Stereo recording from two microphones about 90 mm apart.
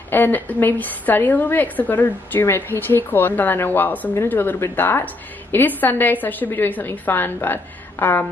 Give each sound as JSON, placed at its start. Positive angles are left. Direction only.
{"t": 0.1, "sound": "speech", "side_deg": 20}